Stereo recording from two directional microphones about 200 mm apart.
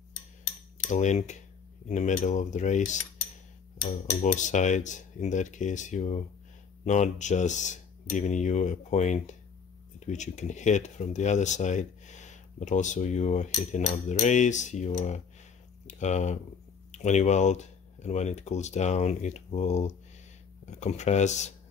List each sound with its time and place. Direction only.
0.8 s speech: 35° left (ahead or behind)
4.2 s speech: 40° left (ahead or behind)